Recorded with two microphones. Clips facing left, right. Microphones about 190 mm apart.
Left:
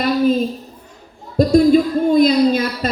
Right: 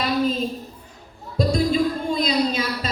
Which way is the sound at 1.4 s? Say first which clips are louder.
Left 9 dB; 55° left (ahead or behind).